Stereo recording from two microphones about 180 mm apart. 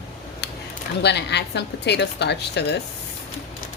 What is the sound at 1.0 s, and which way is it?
A woman's voice, 70° left (ahead or behind).